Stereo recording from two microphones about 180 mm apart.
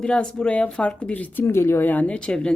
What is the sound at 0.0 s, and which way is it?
Speech, 5° left (ahead or behind).